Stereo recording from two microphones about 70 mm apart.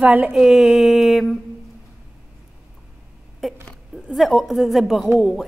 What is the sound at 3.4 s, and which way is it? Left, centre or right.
A woman's voice, centre.